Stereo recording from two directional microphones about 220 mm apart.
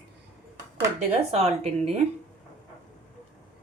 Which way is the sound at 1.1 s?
30° right (ahead or behind).